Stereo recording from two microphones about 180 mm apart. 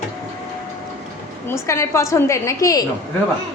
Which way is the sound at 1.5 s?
15° left (ahead or behind).